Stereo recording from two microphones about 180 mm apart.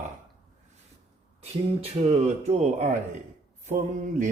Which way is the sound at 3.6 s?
45° right (ahead or behind).